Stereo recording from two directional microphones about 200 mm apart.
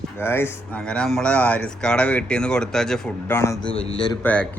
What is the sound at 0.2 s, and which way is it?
Speech, 10° left (ahead or behind).